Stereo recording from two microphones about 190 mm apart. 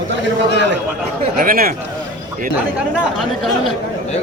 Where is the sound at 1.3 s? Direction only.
50° right (ahead or behind).